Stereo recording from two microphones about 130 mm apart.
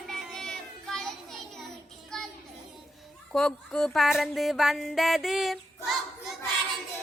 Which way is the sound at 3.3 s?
5° left (ahead or behind).